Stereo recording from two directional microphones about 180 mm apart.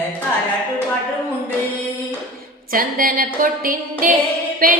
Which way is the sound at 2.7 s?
50° right (ahead or behind).